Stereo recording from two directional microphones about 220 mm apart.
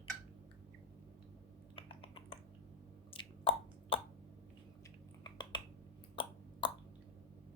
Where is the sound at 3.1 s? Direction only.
25° left (ahead or behind).